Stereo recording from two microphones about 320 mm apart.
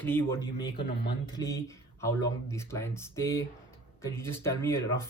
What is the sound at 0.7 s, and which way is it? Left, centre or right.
Speech, left.